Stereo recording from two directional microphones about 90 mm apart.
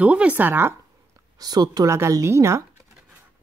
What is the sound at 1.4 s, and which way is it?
Speech, 45° right (ahead or behind).